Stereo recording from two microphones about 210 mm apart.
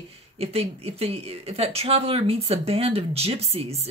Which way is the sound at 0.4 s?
30° right (ahead or behind).